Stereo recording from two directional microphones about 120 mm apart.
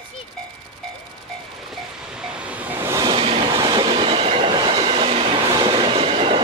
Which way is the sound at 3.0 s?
50° right (ahead or behind).